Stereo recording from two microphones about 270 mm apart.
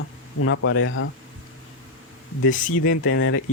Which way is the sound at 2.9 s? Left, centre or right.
Left.